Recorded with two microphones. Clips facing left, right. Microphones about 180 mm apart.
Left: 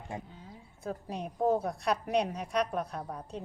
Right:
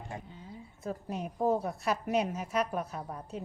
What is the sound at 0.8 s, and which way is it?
A woman's voice, 5° right (ahead or behind).